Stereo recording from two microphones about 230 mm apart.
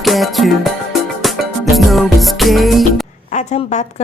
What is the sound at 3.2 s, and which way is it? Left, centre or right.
Speech, left.